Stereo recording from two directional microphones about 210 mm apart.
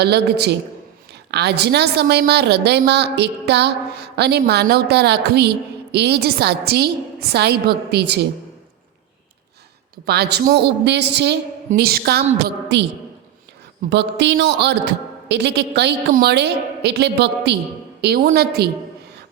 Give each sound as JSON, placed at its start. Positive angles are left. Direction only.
{"t": 0.0, "sound": "a woman's voice", "side_deg": -50}
{"t": 10.1, "sound": "a woman's voice", "side_deg": -50}
{"t": 13.9, "sound": "a woman's voice", "side_deg": -55}